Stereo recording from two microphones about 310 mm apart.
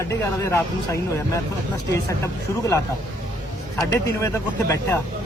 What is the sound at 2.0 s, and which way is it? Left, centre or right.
Speech, centre.